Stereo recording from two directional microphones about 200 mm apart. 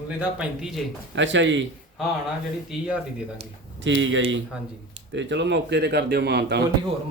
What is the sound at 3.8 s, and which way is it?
Speech, 70° right (ahead or behind).